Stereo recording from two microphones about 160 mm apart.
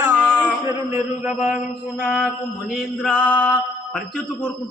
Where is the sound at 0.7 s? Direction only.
15° right (ahead or behind).